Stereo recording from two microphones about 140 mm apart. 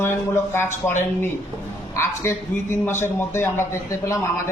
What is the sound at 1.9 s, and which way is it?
A man's voice, 20° left (ahead or behind).